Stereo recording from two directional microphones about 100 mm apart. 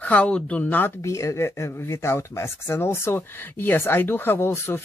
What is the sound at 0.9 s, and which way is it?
Speech, 30° left (ahead or behind).